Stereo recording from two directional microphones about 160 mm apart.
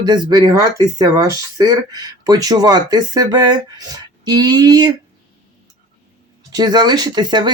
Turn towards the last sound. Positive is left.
turn(degrees=-25)  # may be behind; listen again after turning